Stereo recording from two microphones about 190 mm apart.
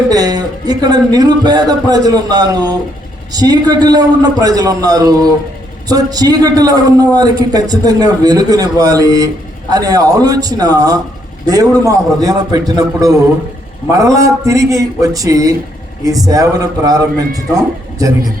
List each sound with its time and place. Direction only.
0.1 s speech: 20° right (ahead or behind)